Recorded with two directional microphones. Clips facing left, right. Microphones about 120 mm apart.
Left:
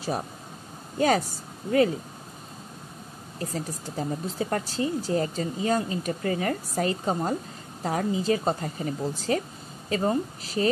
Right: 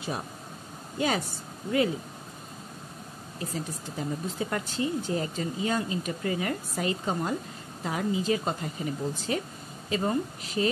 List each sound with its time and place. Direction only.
0.9 s speech: 40° left (ahead or behind)
3.3 s speech: 40° left (ahead or behind)